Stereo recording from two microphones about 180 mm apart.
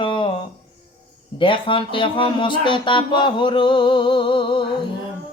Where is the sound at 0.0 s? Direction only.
25° left (ahead or behind).